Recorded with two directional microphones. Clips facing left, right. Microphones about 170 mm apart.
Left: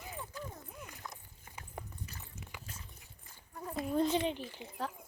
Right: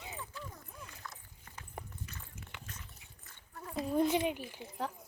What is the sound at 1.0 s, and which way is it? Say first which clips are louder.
Clip-clop: left 1 dB; 15° left (ahead or behind).